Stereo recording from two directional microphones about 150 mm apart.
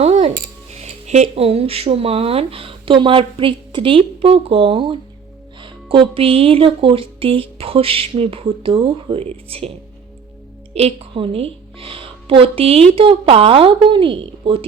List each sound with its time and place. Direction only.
0.0 s a sound: 45° right (ahead or behind)
0.7 s speech: 45° right (ahead or behind)
10.8 s a woman's voice: 40° right (ahead or behind)